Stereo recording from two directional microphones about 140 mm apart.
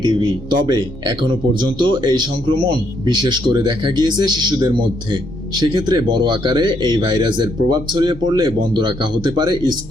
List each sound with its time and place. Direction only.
0.0 s a man's voice: 30° right (ahead or behind)